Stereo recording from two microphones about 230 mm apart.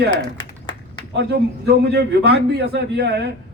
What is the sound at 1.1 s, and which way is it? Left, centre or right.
A man's voice, right.